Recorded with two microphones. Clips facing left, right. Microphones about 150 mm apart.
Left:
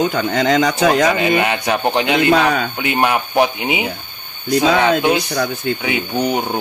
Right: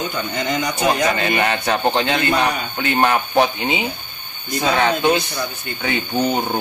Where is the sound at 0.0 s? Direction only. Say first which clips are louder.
Left 7 dB; 85° left.